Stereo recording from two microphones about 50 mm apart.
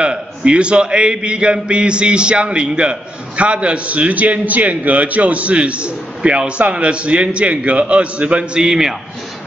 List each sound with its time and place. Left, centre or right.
0.0 s a man's voice: centre
8.6 s a man's voice: centre